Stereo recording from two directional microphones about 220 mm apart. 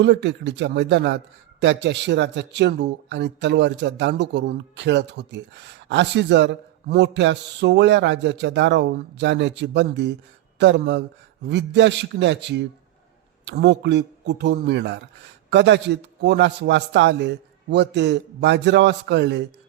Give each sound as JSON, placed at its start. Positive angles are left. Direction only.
{"t": 0.0, "sound": "a man's voice", "side_deg": -55}